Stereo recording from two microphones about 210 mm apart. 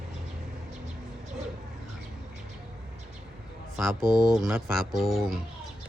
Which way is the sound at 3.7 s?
Centre (ahead or behind).